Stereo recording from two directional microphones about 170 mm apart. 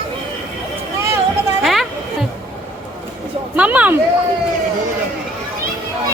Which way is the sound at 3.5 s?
10° right (ahead or behind).